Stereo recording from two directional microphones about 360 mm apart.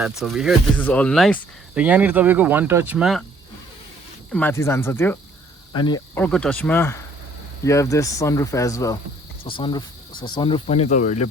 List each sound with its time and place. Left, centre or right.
0.1 s speech: centre
4.3 s speech: centre